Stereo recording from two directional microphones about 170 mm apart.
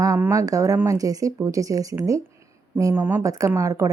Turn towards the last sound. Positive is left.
turn(degrees=-20)  # may be behind; listen again after turning